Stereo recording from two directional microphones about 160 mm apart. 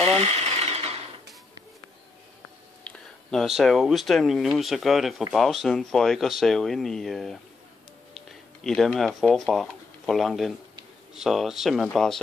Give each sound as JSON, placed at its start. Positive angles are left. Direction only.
{"t": 0.1, "sound": "sewing machine", "side_deg": -45}
{"t": 2.8, "sound": "speech", "side_deg": 5}